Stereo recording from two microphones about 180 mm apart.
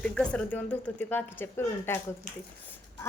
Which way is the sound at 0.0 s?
5° left (ahead or behind).